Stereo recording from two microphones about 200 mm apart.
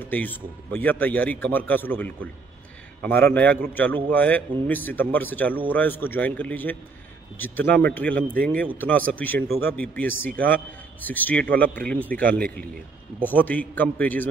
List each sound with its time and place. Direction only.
0.0 s a man's voice: 10° left (ahead or behind)